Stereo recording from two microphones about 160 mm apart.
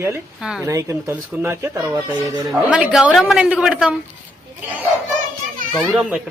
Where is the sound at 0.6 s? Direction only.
20° right (ahead or behind).